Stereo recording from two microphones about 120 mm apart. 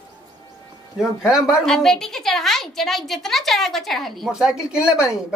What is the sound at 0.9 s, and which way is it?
A woman's voice, 5° right (ahead or behind).